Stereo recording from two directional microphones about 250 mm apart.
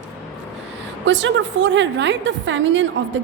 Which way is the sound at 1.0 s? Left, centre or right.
Right.